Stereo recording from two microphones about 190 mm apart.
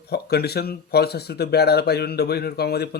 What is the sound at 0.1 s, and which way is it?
Speech, 60° left (ahead or behind).